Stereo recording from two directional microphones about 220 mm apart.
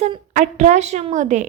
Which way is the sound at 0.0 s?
30° right (ahead or behind).